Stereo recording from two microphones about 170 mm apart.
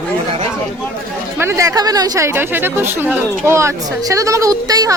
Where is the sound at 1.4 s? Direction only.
15° right (ahead or behind).